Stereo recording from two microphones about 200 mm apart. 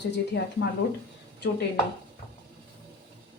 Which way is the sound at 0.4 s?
65° left (ahead or behind).